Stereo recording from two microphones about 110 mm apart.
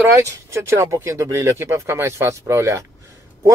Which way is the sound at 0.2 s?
25° right (ahead or behind).